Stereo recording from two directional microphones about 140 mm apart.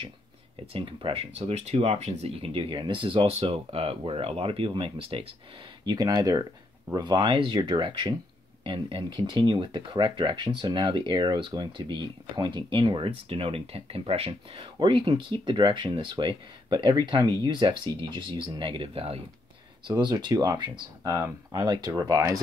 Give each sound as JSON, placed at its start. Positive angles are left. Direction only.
{"t": 0.7, "sound": "speech", "side_deg": -40}
{"t": 5.9, "sound": "speech", "side_deg": -30}
{"t": 20.0, "sound": "speech", "side_deg": -30}